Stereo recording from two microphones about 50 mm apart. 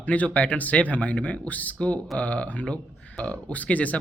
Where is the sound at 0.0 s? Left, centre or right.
Left.